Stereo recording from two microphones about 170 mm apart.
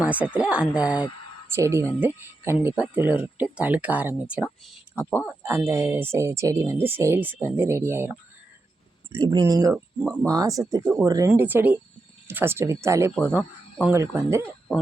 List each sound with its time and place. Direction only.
0.0 s speech: 10° right (ahead or behind)
9.2 s speech: 25° right (ahead or behind)
9.7 s speech: centre (ahead or behind)
10.2 s speech: 20° right (ahead or behind)